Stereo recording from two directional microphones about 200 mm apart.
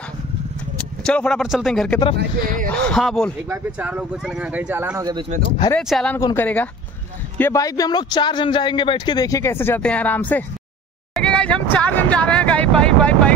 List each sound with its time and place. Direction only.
0.7 s a man's voice: 5° left (ahead or behind)
2.1 s speech: 45° right (ahead or behind)
2.7 s speech: 5° left (ahead or behind)
3.4 s speech: 10° right (ahead or behind)
5.7 s speech: centre (ahead or behind)